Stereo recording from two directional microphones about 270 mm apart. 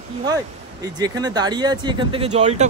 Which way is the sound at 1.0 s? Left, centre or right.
Centre.